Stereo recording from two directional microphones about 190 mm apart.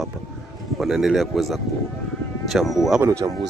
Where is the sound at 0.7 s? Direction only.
Centre (ahead or behind).